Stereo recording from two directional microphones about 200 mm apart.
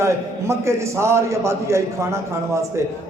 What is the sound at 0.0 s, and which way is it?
A man's voice, 15° right (ahead or behind).